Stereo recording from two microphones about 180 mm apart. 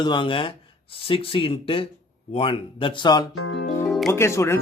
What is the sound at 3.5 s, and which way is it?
Speech, 70° left (ahead or behind).